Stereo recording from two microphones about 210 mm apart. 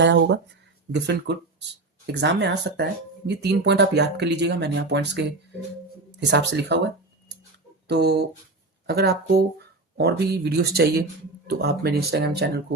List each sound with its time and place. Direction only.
0.0 s speech: 60° right (ahead or behind)